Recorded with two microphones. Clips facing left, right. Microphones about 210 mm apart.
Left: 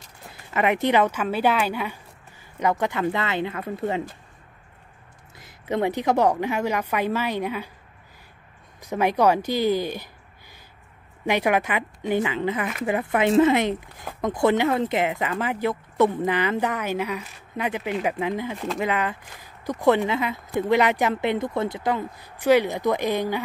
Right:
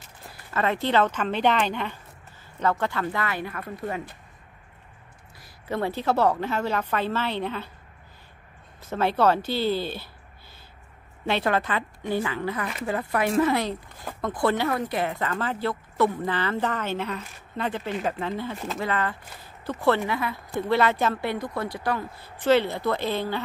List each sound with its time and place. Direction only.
0.3 s speech: 15° left (ahead or behind)
5.4 s speech: 20° left (ahead or behind)
8.8 s speech: 15° left (ahead or behind)
11.2 s speech: 15° left (ahead or behind)